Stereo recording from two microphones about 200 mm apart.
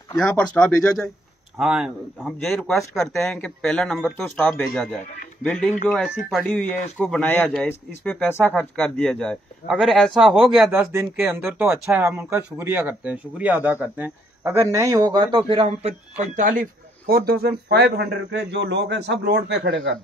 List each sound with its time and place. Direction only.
0.6 s speech: 5° left (ahead or behind)
10.7 s a man's voice: 10° right (ahead or behind); by 15.9 s 30° right (ahead or behind)
16.3 s a man's voice: 40° right (ahead or behind); by 20.0 s 65° right (ahead or behind)